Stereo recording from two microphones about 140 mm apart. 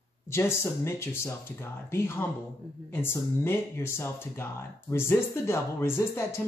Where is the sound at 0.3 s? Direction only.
20° left (ahead or behind).